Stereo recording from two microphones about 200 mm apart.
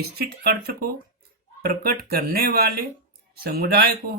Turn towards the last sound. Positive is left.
turn(degrees=-50)  # may be behind; listen again after turning